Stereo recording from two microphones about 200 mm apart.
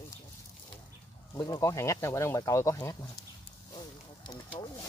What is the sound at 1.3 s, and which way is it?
Speech, 15° left (ahead or behind).